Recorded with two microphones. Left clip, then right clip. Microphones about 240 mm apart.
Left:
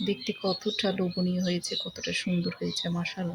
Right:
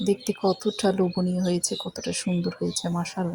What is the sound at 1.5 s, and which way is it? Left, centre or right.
Speech, centre.